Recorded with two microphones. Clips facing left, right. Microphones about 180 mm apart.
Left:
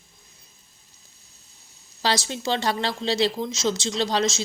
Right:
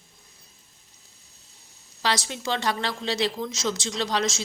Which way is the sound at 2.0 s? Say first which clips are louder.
Left 2 dB; 30° left (ahead or behind).